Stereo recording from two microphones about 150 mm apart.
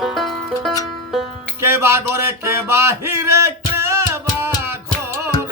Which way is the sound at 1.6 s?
20° right (ahead or behind).